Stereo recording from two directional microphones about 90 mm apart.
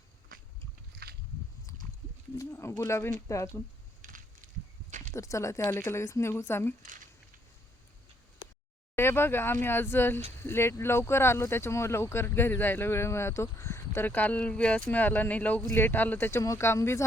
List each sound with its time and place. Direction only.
2.4 s speech: 30° left (ahead or behind)
5.1 s speech: 35° left (ahead or behind)
9.0 s speech: 25° left (ahead or behind)